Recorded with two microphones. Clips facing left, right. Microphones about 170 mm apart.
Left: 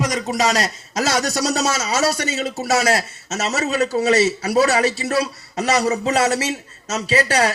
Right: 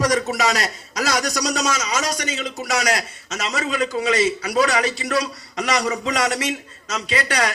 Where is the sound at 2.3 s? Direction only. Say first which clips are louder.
Left 4 dB; 30° left (ahead or behind).